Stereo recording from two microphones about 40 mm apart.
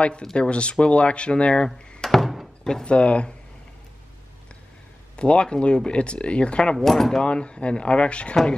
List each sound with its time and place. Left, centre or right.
0.0 s speech: left
2.0 s thunk: centre
2.6 s speech: centre
2.9 s speech: left
5.1 s speech: left
6.8 s speech: centre
7.2 s speech: left